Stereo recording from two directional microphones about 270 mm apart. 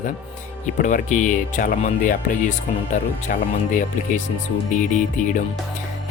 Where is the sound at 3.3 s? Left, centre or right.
Left.